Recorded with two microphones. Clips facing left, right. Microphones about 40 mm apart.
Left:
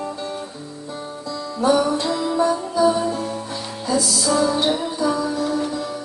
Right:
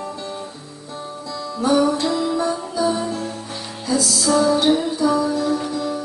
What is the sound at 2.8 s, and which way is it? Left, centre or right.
Music, centre.